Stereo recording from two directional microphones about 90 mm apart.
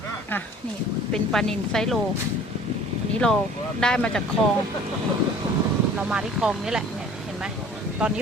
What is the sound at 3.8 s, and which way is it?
Speech, 10° left (ahead or behind).